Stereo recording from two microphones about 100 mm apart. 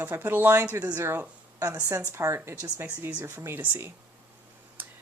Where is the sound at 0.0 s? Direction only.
20° right (ahead or behind).